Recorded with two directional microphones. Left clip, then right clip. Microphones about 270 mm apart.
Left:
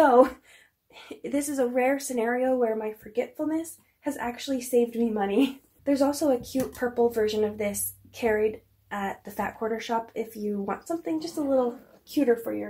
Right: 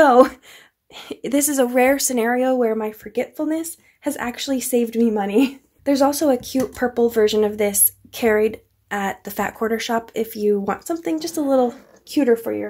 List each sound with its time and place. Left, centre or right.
0.0 s a woman's voice: right